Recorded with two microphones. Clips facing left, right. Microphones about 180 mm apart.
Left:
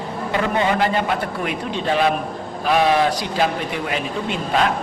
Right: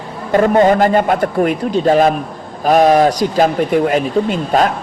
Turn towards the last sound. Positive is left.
turn(degrees=-45)  # may be behind; listen again after turning